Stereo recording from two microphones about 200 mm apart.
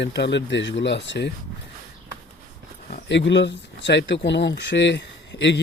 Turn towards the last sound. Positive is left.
turn(degrees=60)  # may be behind; listen again after turning